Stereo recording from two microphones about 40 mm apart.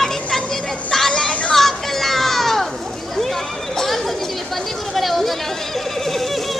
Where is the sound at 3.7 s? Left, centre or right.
Centre.